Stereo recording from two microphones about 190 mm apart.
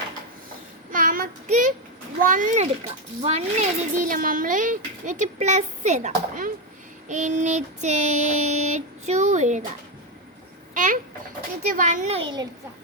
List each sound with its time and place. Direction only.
0.9 s child singing: 45° right (ahead or behind)
2.2 s a child's voice: 45° right (ahead or behind)
10.8 s a child's voice: 45° right (ahead or behind); by 12.5 s 25° right (ahead or behind)